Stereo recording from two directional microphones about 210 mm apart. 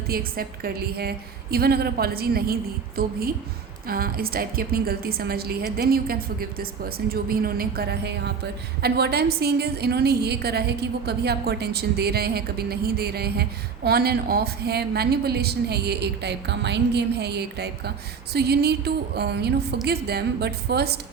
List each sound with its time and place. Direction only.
0.1 s a woman's voice: 45° right (ahead or behind)